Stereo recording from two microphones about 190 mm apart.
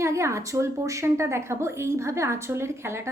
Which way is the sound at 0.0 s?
15° right (ahead or behind).